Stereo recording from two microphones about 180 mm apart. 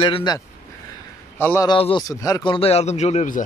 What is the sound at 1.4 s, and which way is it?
Speech, 10° left (ahead or behind).